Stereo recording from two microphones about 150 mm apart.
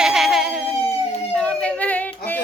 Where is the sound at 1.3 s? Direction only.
5° left (ahead or behind).